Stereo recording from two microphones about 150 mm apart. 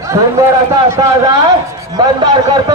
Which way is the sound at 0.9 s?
25° right (ahead or behind).